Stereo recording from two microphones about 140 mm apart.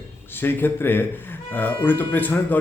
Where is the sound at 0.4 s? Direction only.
15° left (ahead or behind).